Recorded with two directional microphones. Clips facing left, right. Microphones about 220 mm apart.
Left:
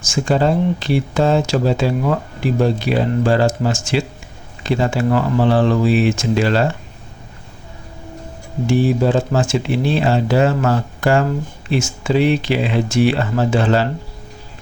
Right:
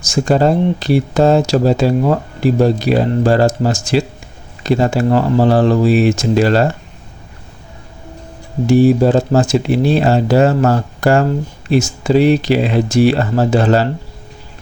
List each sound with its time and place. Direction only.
0.0 s speech: 40° right (ahead or behind)
8.6 s speech: 40° right (ahead or behind)